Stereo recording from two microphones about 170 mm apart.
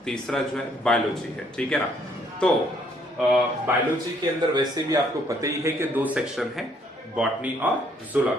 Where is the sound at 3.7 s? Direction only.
10° right (ahead or behind).